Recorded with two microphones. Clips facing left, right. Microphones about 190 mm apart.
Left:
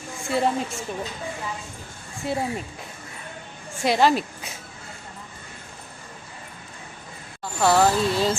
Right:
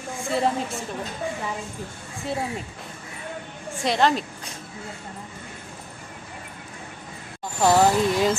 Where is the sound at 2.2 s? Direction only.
5° left (ahead or behind).